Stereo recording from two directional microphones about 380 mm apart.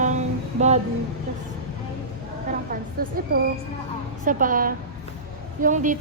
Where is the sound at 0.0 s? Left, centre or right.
Centre.